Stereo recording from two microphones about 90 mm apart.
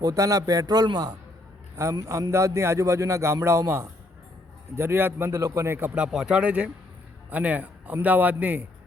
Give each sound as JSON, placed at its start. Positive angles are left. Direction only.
{"t": 0.0, "sound": "a man's voice", "side_deg": -40}
{"t": 1.7, "sound": "a man's voice", "side_deg": -35}